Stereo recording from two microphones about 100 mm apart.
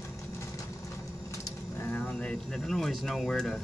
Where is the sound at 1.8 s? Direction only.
15° left (ahead or behind).